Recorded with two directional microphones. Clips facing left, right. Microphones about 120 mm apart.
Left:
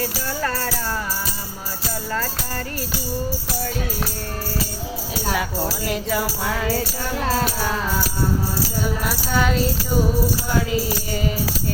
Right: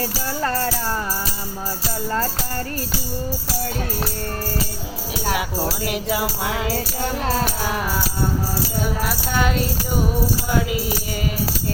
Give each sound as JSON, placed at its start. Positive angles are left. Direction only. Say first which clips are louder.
{"t": 5.3, "sound": "music", "louder": "right 1 dB", "side_deg": -15}
{"t": 9.0, "sound": "speech", "louder": "left 2 dB", "side_deg": 0}
{"t": 10.7, "sound": "speech", "louder": "left 1 dB", "side_deg": -5}